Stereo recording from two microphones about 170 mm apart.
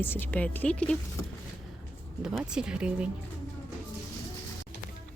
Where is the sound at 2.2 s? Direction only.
5° right (ahead or behind).